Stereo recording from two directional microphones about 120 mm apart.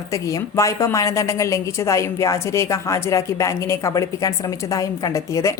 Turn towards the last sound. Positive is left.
turn(degrees=25)  # may be behind; listen again after turning